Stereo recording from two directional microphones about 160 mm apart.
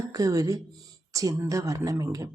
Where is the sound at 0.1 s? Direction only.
20° right (ahead or behind).